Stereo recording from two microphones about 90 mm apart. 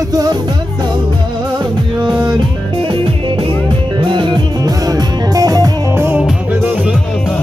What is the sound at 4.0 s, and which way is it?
Music, 60° right (ahead or behind).